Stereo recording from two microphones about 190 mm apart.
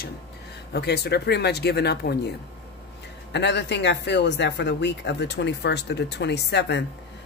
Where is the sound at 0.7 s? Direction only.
60° left (ahead or behind).